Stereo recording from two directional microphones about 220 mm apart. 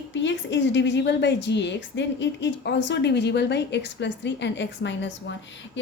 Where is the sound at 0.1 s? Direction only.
55° left (ahead or behind).